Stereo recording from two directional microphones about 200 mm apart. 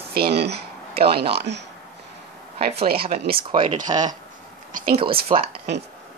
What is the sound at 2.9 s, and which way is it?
Speech, 50° right (ahead or behind).